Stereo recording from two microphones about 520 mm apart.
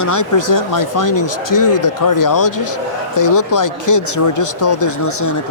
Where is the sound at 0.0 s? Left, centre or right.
Left.